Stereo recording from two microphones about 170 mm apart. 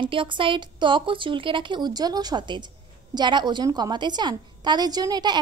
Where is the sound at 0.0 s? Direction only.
30° right (ahead or behind).